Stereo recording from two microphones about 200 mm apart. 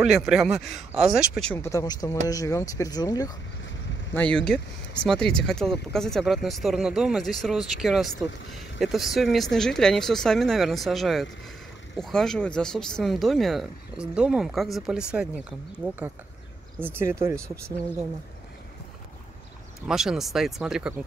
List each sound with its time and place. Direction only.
0.0 s speech: centre (ahead or behind)
1.6 s speech: 15° left (ahead or behind)
4.1 s speech: 10° left (ahead or behind)
16.8 s speech: 10° right (ahead or behind)
19.9 s speech: centre (ahead or behind)